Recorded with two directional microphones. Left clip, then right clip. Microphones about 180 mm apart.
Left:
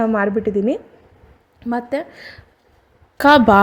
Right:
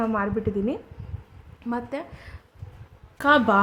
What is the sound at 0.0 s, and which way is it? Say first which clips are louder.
A woman's voice: left 8 dB; 25° left (ahead or behind).